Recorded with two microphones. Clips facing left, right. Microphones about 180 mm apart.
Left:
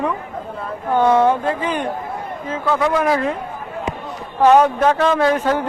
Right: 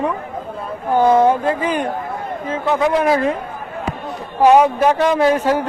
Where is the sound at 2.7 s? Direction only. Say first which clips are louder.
Right 2 dB; 20° right (ahead or behind).